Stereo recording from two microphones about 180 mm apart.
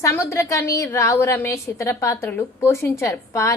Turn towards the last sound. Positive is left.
turn(degrees=15)  # may be behind; listen again after turning